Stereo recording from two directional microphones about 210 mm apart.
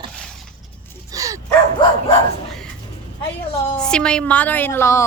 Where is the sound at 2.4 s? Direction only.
Centre (ahead or behind).